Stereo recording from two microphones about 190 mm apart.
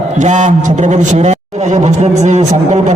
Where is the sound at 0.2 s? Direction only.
40° right (ahead or behind).